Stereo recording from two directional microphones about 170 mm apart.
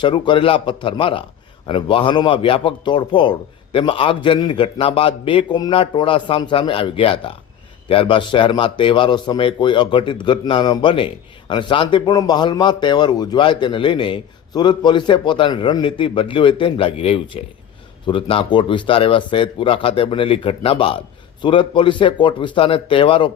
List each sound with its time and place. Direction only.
0.0 s a man's voice: 30° left (ahead or behind)